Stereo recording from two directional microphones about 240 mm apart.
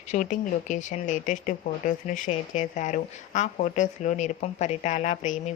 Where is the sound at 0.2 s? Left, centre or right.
Left.